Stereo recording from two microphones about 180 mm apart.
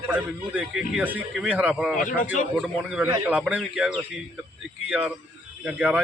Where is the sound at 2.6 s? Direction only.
Centre (ahead or behind).